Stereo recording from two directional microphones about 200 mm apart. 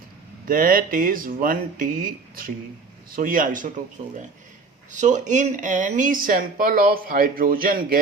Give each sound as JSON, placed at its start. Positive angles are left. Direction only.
{"t": 0.4, "sound": "speech", "side_deg": -45}
{"t": 4.9, "sound": "speech", "side_deg": -35}